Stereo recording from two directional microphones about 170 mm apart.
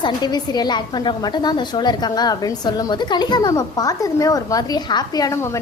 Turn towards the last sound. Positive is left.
turn(degrees=20)  # may be behind; listen again after turning